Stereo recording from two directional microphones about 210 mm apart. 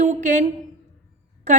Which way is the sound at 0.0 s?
35° right (ahead or behind).